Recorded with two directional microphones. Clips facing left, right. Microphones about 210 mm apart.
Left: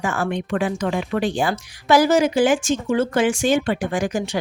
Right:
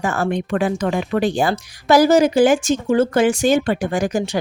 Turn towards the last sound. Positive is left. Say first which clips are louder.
# right 3 dB
turn(degrees=-40)  # may be behind; listen again after turning